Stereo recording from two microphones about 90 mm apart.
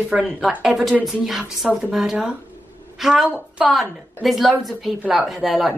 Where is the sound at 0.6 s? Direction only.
Centre (ahead or behind).